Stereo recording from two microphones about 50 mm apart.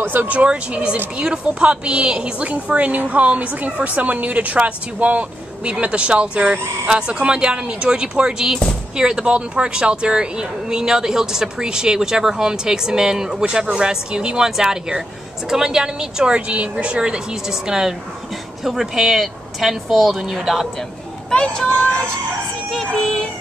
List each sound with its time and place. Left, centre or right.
0.0 s a woman's voice: right; by 20.6 s centre
21.3 s speech: centre
22.7 s speech: centre